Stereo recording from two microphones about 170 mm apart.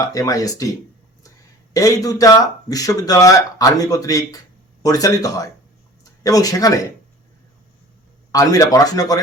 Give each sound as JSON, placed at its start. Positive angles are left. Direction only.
{"t": 0.0, "sound": "a man's voice", "side_deg": 20}
{"t": 1.7, "sound": "a man's voice", "side_deg": 20}
{"t": 8.3, "sound": "a man's voice", "side_deg": 20}